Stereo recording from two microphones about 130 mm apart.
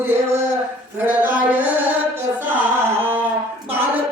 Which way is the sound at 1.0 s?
15° right (ahead or behind).